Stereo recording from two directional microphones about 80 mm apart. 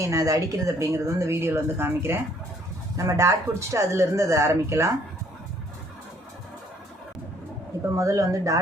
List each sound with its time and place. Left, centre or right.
0.0 s speech: right
3.0 s speech: right
7.9 s speech: right